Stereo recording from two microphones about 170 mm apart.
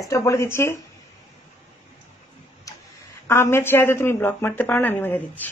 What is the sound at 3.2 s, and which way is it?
Speech, 15° left (ahead or behind).